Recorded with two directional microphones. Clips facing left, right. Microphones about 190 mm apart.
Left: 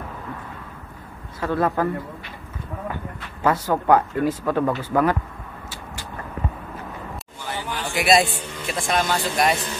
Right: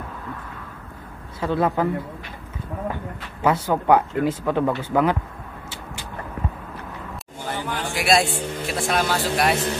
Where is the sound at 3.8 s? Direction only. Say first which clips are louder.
Even; 15° right (ahead or behind).